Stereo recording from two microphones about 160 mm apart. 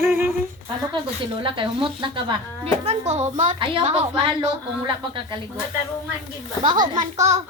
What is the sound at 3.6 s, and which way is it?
Speech, 35° right (ahead or behind).